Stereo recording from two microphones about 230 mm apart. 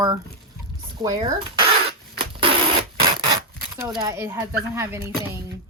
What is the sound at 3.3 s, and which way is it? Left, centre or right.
Speech, centre.